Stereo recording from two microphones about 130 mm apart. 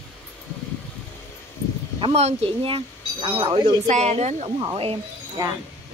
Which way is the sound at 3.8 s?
60° right (ahead or behind).